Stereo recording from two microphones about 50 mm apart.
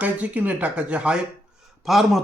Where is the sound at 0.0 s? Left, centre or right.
Right.